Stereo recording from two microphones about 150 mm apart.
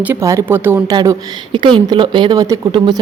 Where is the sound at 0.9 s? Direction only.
30° right (ahead or behind).